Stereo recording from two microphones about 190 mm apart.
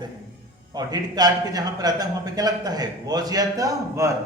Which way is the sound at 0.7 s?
20° right (ahead or behind).